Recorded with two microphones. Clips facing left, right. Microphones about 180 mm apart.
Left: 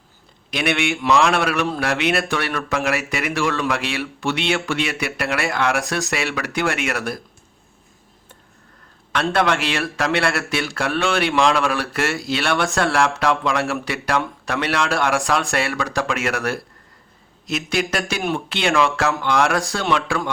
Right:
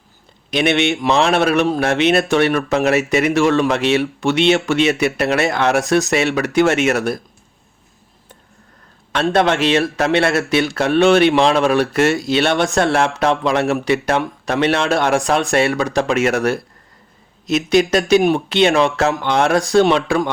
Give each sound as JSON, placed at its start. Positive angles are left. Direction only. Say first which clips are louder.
{"t": 0.5, "sound": "a man's voice", "louder": "right 5 dB", "side_deg": -25}
{"t": 9.1, "sound": "a man's voice", "louder": "right 4 dB", "side_deg": -25}